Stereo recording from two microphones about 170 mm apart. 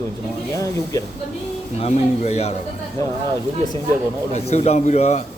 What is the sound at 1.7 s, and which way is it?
Speech, 40° left (ahead or behind).